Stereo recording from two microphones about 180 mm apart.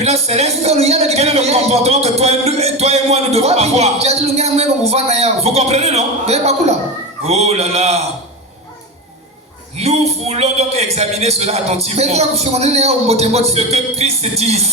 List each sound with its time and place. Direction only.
0.0 s speech: 35° right (ahead or behind)
9.7 s speech: 35° right (ahead or behind)